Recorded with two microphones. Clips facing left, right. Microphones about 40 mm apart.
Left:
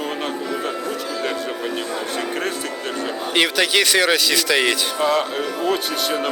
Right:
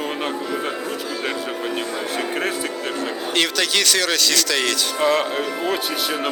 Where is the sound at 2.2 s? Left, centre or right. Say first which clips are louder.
Right 2 dB; centre.